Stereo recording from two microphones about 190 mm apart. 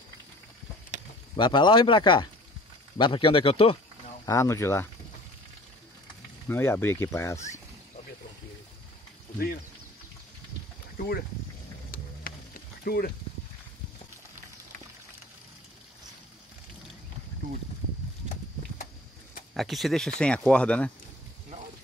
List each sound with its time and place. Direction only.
1.3 s speech: 25° left (ahead or behind)
4.3 s speech: 15° left (ahead or behind)
6.4 s speech: 10° left (ahead or behind)
11.0 s speech: 50° left (ahead or behind)
11.9 s a sound: 50° left (ahead or behind)
19.5 s speech: centre (ahead or behind)